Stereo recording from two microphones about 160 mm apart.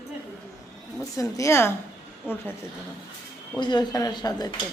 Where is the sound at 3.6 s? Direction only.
25° left (ahead or behind).